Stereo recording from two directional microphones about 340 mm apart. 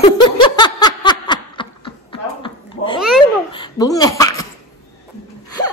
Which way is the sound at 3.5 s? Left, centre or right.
Centre.